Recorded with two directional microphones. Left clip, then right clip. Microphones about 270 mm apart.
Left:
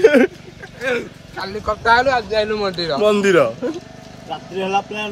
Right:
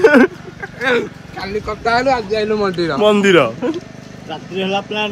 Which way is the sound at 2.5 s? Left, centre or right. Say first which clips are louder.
Right 3 dB; centre.